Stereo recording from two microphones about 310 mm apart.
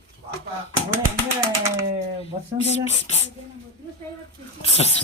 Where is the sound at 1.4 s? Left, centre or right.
Centre.